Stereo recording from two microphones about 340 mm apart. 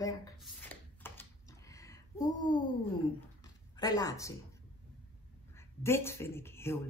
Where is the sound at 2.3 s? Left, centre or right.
Left.